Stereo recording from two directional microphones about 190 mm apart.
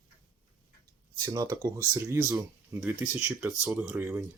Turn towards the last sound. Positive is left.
turn(degrees=-10)  # may be behind; listen again after turning